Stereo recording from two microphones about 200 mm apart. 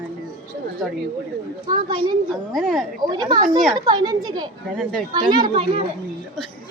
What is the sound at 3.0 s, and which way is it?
A child's voice, 20° right (ahead or behind).